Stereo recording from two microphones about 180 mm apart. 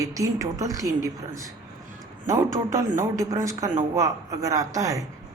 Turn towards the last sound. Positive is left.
turn(degrees=-20)  # may be behind; listen again after turning